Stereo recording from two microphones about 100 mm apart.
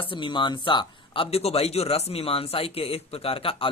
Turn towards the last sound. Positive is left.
turn(degrees=65)  # may be behind; listen again after turning